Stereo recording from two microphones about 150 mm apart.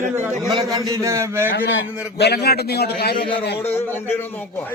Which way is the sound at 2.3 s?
90° left.